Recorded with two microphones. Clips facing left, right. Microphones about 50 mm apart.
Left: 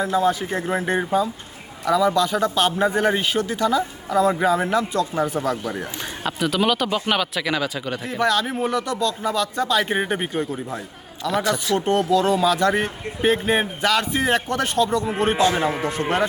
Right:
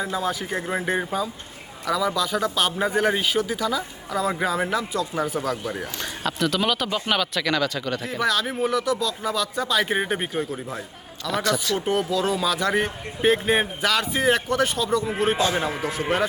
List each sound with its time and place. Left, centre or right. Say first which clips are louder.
0.0 s speech: left 6 dB; centre
8.0 s speech: left 4 dB; centre
15.4 s a man's voice: left 4 dB; left
15.8 s speech: left 2 dB; centre